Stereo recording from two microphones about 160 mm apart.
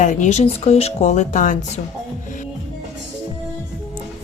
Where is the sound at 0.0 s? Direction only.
50° left (ahead or behind).